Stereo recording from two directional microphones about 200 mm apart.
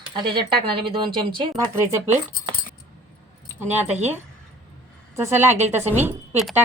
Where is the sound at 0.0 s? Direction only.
25° right (ahead or behind).